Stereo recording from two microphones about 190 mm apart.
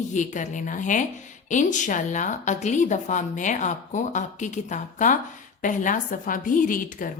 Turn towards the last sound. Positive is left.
turn(degrees=45)  # may be behind; listen again after turning